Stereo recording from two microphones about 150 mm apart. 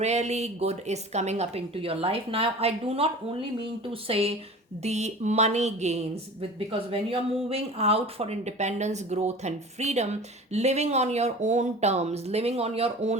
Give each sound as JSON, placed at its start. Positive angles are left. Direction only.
{"t": 0.0, "sound": "speech", "side_deg": -50}
{"t": 4.1, "sound": "a woman's voice", "side_deg": -40}